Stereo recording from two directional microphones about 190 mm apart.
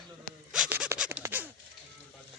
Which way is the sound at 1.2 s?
10° right (ahead or behind).